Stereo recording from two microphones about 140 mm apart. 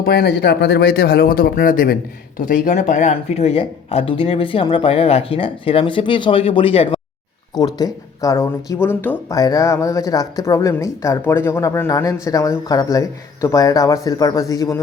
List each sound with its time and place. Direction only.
0.9 s speech: 90° left
2.4 s speech: 70° left (ahead or behind); by 7.0 s 40° left (ahead or behind)
7.5 s speech: 30° left (ahead or behind)
9.3 s speech: 25° left (ahead or behind)